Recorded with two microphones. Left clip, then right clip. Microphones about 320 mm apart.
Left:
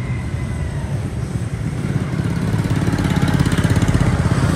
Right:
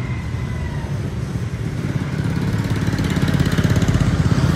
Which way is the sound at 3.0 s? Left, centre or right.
Centre.